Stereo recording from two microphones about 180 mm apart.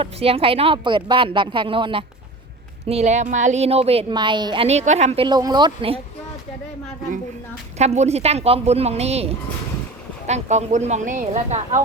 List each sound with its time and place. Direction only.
0.0 s a woman's voice: 35° right (ahead or behind)
7.8 s a woman's voice: 40° right (ahead or behind)